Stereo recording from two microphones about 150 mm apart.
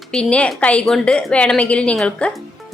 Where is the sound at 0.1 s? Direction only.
5° left (ahead or behind).